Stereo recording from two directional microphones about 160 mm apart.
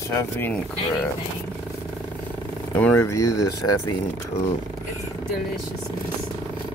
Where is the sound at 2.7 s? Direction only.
10° left (ahead or behind).